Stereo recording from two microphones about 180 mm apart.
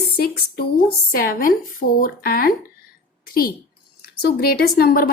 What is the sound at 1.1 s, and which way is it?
A woman's voice, 55° left (ahead or behind).